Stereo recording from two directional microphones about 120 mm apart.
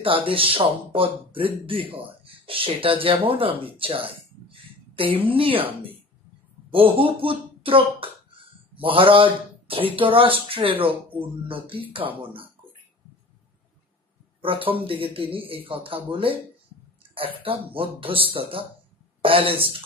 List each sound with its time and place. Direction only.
0.0 s speech: 50° right (ahead or behind)
14.4 s speech: 50° right (ahead or behind)